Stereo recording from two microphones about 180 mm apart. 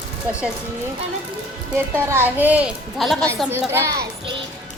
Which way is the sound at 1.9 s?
10° right (ahead or behind).